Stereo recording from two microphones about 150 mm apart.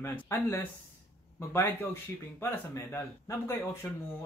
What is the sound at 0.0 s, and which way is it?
Speech, 15° left (ahead or behind).